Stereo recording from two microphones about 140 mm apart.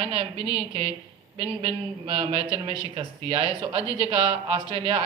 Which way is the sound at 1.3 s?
45° right (ahead or behind).